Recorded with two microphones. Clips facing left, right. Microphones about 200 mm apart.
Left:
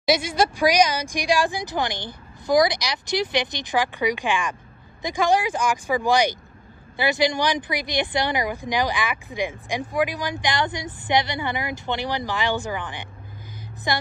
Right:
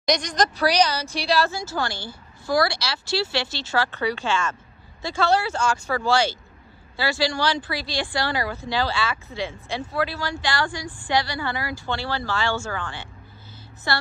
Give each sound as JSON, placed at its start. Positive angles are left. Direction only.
{"t": 0.0, "sound": "speech", "side_deg": 5}